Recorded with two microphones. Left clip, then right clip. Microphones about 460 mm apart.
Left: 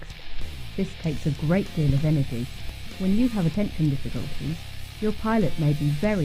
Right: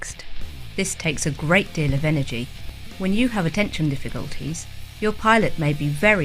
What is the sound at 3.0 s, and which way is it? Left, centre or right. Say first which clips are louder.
Speech: right 3 dB; right.